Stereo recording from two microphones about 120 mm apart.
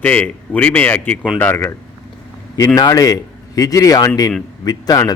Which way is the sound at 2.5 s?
30° left (ahead or behind).